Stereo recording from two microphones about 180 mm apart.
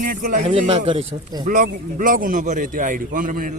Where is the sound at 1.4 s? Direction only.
45° right (ahead or behind).